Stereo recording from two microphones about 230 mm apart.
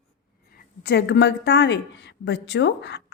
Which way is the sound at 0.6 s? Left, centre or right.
Left.